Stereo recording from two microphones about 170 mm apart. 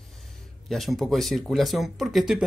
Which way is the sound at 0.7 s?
Centre (ahead or behind).